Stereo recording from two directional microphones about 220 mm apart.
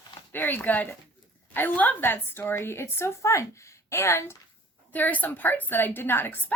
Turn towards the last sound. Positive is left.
turn(degrees=10)  # may be behind; listen again after turning